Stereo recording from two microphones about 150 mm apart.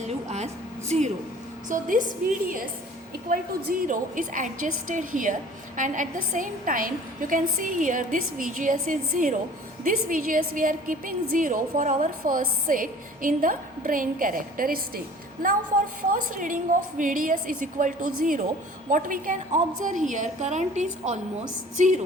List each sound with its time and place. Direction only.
0.0 s a sound: 50° right (ahead or behind)
1.7 s a woman's voice: 60° right (ahead or behind)
3.2 s a woman's voice: 70° right (ahead or behind)
16.0 s a woman's voice: 60° right (ahead or behind)
21.8 s music: 55° right (ahead or behind)